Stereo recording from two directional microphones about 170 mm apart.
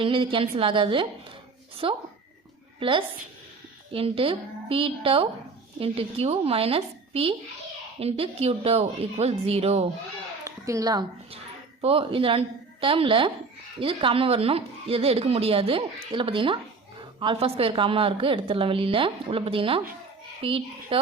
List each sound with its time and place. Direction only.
0.0 s a woman's voice: 30° right (ahead or behind)
3.9 s a woman's voice: 35° right (ahead or behind)
10.4 s a sound: 20° right (ahead or behind)
11.8 s a woman's voice: 35° right (ahead or behind)